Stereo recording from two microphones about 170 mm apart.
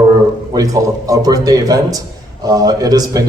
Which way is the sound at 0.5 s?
20° right (ahead or behind).